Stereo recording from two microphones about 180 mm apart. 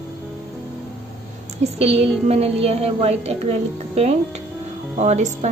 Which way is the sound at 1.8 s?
35° right (ahead or behind).